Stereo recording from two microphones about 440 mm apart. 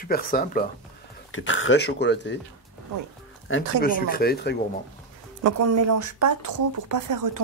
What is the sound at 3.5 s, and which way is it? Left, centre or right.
Speech, left.